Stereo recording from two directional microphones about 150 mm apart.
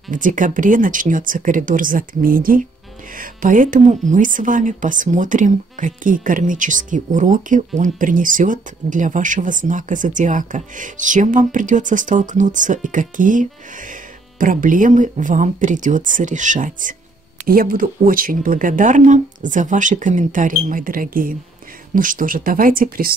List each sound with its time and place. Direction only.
0.1 s speech: 60° right (ahead or behind)
17.5 s speech: 70° right (ahead or behind)